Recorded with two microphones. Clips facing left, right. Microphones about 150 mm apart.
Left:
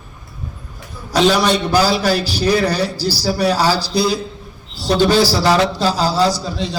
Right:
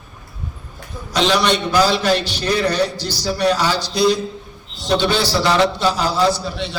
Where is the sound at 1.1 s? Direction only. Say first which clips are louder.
Left 3 dB; 35° left (ahead or behind).